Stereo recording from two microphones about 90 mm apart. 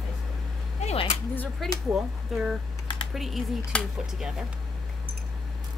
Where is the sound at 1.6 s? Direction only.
Centre (ahead or behind).